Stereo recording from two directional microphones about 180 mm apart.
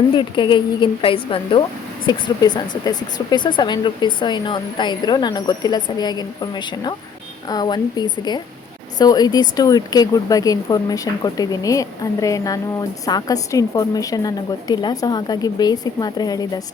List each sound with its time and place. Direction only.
0.2 s speech: 25° left (ahead or behind)